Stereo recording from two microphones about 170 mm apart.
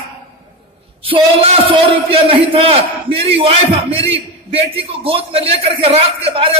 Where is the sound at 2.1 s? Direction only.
35° right (ahead or behind).